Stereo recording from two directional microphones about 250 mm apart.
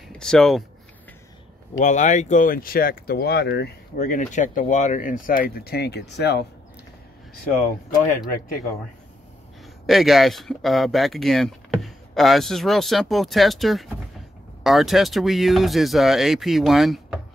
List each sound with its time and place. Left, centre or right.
0.1 s speech: centre
1.8 s speech: left
7.5 s speech: left
9.8 s speech: centre